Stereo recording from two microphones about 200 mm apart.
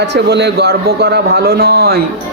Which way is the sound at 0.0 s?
60° right (ahead or behind).